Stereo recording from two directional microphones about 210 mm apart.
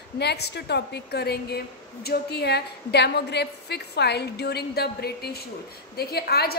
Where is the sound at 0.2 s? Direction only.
50° left (ahead or behind).